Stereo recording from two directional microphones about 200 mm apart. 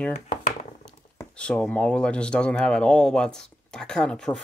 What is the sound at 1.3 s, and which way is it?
Speech, 5° left (ahead or behind).